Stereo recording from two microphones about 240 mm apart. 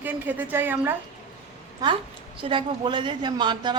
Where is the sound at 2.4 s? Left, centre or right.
Right.